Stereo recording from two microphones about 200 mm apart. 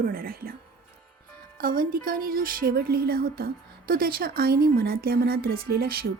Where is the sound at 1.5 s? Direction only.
45° right (ahead or behind).